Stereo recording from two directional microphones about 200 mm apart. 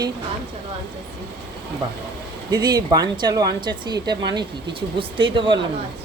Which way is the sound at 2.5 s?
20° right (ahead or behind).